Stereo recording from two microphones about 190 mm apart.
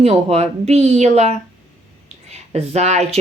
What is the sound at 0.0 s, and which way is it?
A woman's voice, 35° right (ahead or behind).